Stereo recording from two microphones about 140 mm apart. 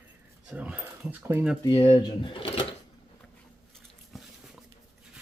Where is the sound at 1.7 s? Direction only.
45° left (ahead or behind).